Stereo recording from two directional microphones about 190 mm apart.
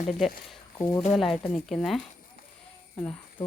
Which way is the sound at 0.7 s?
15° left (ahead or behind).